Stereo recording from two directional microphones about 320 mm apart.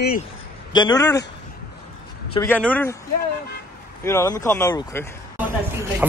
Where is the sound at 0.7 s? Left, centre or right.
Centre.